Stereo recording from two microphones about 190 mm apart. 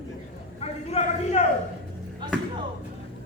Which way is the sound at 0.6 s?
35° left (ahead or behind).